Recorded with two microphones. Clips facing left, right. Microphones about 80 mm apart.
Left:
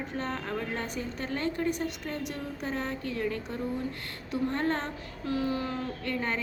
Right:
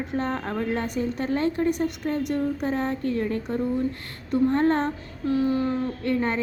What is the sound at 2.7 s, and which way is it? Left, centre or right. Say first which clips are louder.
Speech: right 7 dB; right.